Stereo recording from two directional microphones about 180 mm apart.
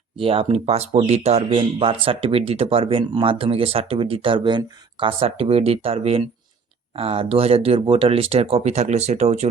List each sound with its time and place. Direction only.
0.2 s speech: 30° right (ahead or behind)